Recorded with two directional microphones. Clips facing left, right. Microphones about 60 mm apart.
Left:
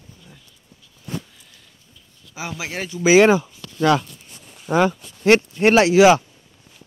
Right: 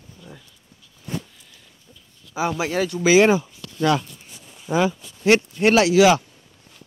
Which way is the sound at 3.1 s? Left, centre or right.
Left.